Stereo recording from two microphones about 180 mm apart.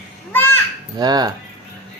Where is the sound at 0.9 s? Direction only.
20° right (ahead or behind).